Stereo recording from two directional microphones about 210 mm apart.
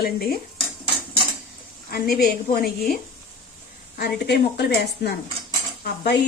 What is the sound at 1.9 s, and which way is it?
Speech, 45° left (ahead or behind).